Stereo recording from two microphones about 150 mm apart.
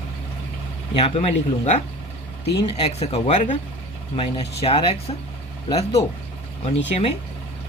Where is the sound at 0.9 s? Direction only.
40° left (ahead or behind).